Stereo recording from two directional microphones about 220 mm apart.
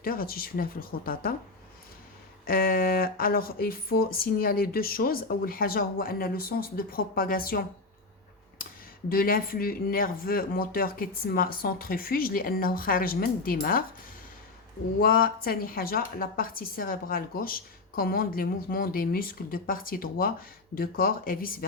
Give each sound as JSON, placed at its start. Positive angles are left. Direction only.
{"t": 0.0, "sound": "a woman's voice", "side_deg": 40}
{"t": 2.5, "sound": "a woman's voice", "side_deg": 40}
{"t": 9.0, "sound": "a woman's voice", "side_deg": 40}
{"t": 15.0, "sound": "a woman's voice", "side_deg": 40}